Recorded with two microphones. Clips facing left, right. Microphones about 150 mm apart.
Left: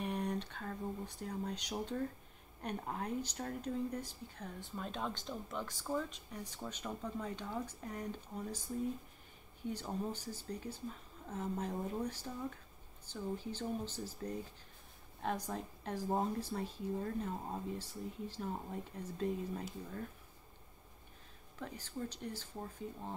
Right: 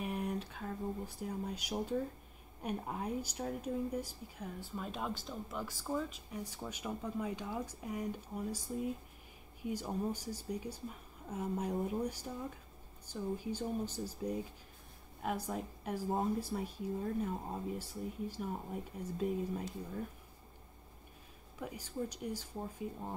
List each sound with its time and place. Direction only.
0.0 s speech: 5° right (ahead or behind)
21.5 s speech: 10° right (ahead or behind)